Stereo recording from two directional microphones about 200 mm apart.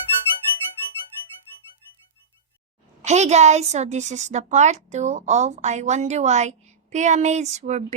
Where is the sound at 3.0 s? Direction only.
35° right (ahead or behind).